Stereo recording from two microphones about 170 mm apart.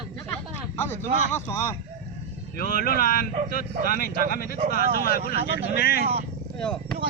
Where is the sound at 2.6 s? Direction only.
60° left (ahead or behind).